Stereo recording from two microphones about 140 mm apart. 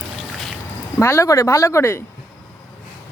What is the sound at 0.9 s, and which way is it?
Speech, 20° left (ahead or behind).